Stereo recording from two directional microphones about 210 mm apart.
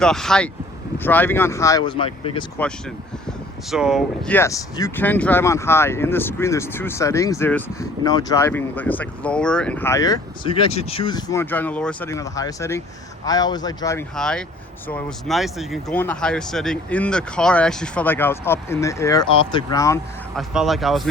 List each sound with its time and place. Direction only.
0.0 s speech: centre (ahead or behind); by 2.4 s 25° left (ahead or behind)
3.2 s speech: centre (ahead or behind); by 14.0 s 15° left (ahead or behind)
14.2 s speech: 5° left (ahead or behind)
20.3 s speech: centre (ahead or behind)